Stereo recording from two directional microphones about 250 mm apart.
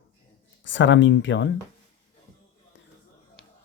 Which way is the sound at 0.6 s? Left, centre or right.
Left.